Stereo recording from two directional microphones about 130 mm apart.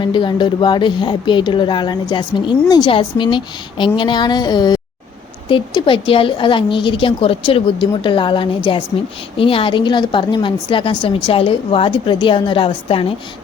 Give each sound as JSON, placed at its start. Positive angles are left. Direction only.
{"t": 0.0, "sound": "speech", "side_deg": 35}